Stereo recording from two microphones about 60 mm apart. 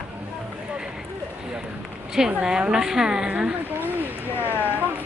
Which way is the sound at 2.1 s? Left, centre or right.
Centre.